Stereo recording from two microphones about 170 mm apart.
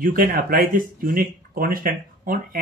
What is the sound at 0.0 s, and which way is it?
Speech, 55° right (ahead or behind).